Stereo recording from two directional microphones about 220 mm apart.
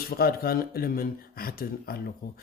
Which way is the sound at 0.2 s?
40° left (ahead or behind).